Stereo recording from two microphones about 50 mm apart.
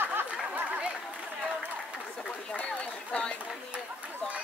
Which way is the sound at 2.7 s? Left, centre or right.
Left.